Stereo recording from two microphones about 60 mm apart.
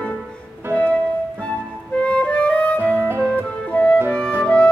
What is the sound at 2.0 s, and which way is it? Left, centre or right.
Music, left.